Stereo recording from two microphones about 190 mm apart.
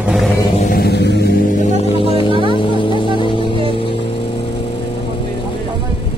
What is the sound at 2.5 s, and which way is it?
Vehicle, 25° left (ahead or behind).